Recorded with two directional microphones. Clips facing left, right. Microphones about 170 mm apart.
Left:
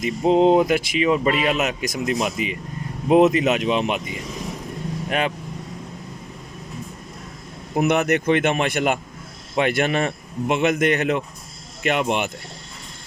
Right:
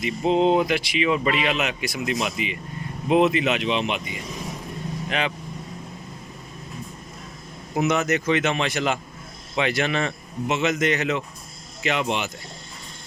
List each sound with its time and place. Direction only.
0.0 s speech: 40° left (ahead or behind)
7.8 s speech: 60° left (ahead or behind)